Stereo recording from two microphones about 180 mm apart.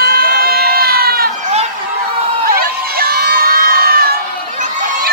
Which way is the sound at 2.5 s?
60° right (ahead or behind).